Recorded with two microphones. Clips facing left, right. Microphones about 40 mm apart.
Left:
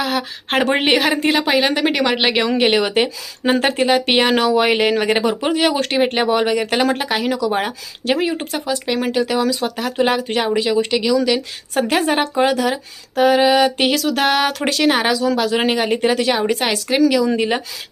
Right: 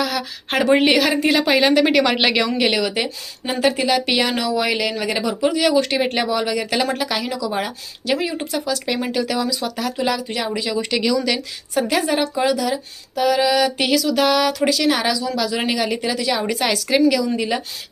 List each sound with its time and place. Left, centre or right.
0.0 s speech: left
1.3 s a woman's voice: centre
2.6 s speech: left
2.9 s a woman's voice: left
9.4 s a woman's voice: left
10.4 s speech: left
10.9 s a woman's voice: centre
11.7 s a woman's voice: left